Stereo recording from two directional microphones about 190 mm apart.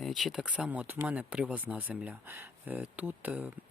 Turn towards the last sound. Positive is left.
turn(degrees=-10)  # may be behind; listen again after turning